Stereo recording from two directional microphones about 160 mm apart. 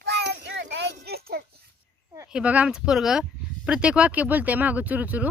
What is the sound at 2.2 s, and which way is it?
Speech, 5° right (ahead or behind).